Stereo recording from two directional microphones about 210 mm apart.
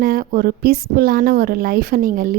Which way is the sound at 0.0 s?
40° right (ahead or behind).